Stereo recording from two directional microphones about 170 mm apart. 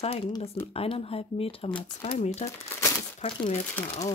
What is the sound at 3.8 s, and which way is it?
Speech, 10° left (ahead or behind).